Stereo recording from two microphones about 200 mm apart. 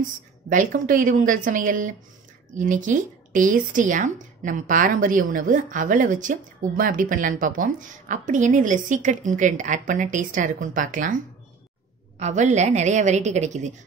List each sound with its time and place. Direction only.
0.5 s a woman's voice: 40° right (ahead or behind)
12.2 s a woman's voice: 35° right (ahead or behind)